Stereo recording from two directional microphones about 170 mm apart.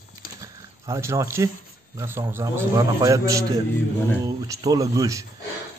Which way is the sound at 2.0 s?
15° right (ahead or behind).